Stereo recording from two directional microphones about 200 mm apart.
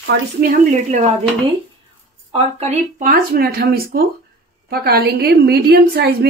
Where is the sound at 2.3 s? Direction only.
35° right (ahead or behind).